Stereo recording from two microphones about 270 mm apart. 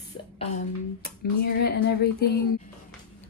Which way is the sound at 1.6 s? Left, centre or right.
Left.